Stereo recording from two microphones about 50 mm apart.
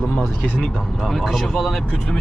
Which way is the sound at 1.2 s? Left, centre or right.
Centre.